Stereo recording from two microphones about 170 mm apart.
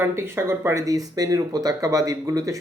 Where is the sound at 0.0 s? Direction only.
15° right (ahead or behind).